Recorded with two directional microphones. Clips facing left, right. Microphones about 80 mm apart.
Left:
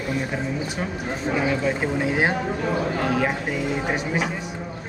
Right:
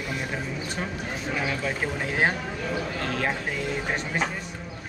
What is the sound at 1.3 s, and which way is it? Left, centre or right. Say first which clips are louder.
Speech: left 6 dB; centre.